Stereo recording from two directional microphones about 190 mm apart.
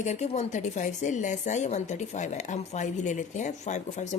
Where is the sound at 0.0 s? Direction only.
35° left (ahead or behind).